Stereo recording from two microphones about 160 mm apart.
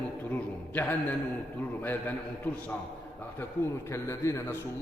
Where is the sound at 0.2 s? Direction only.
10° left (ahead or behind).